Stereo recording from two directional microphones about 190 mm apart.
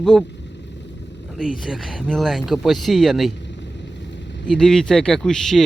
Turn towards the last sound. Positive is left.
turn(degrees=0)  # may be behind; listen again after turning